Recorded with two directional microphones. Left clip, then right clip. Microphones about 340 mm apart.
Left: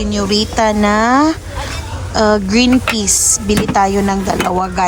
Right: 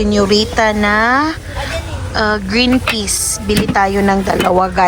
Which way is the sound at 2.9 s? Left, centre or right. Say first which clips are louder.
Left 3 dB; left.